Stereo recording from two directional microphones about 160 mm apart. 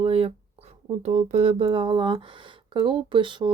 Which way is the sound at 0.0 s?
35° right (ahead or behind).